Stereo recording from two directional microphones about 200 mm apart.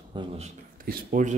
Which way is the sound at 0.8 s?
45° right (ahead or behind).